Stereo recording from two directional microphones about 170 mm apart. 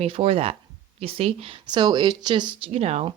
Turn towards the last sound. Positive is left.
turn(degrees=-35)  # may be behind; listen again after turning